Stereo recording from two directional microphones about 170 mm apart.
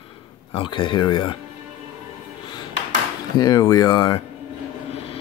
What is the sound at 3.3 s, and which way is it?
Speech, 20° left (ahead or behind).